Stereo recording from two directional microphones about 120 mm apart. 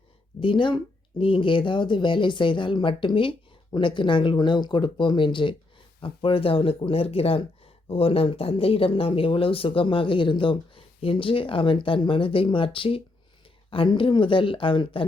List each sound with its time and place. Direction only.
0.3 s speech: 45° left (ahead or behind)